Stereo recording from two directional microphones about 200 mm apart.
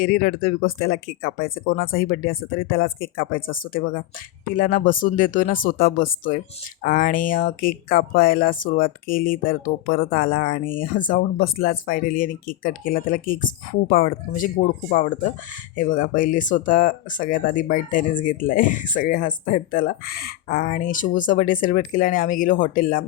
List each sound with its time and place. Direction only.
0.0 s speech: 45° left (ahead or behind)